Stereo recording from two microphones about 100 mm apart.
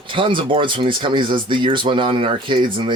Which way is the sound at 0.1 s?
55° right (ahead or behind).